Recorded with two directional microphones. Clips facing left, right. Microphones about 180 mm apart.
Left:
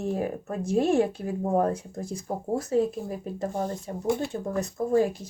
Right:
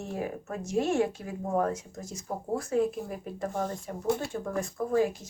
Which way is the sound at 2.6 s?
25° left (ahead or behind).